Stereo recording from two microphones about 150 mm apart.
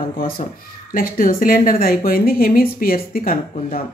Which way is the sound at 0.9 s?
70° left (ahead or behind).